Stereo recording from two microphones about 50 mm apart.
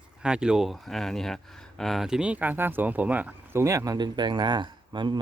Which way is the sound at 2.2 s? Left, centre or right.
Right.